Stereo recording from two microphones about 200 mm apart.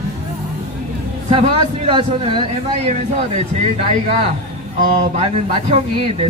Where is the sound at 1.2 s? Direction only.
30° right (ahead or behind).